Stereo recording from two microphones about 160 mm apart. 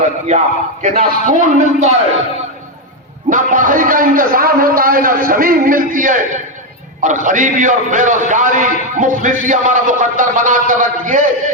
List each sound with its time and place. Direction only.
0.3 s a man's voice: 45° right (ahead or behind)
3.2 s a man's voice: 55° right (ahead or behind)